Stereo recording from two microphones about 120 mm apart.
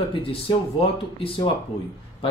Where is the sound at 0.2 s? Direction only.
50° left (ahead or behind).